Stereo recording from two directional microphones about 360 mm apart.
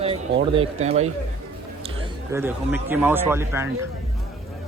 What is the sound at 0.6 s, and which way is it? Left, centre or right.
Speech, centre.